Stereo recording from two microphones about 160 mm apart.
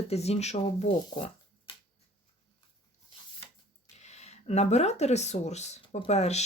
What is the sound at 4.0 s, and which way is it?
Speech, 45° left (ahead or behind).